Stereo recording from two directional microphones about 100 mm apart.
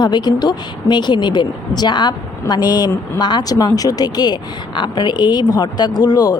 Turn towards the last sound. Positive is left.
turn(degrees=40)  # may be behind; listen again after turning